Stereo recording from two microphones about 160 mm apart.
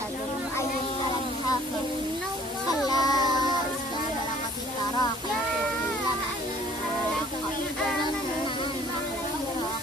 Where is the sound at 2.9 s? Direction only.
25° left (ahead or behind).